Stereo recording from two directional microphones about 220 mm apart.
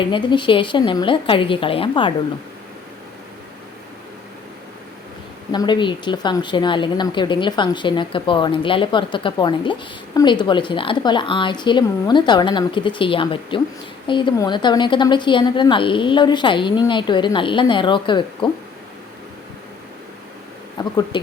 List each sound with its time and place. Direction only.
0.0 s speech: 20° left (ahead or behind)
5.5 s speech: 20° left (ahead or behind)
20.7 s speech: 20° left (ahead or behind)